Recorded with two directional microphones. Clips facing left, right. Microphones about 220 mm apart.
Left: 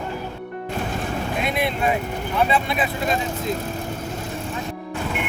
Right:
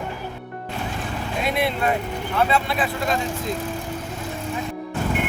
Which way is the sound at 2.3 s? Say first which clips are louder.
Even; 20° left (ahead or behind).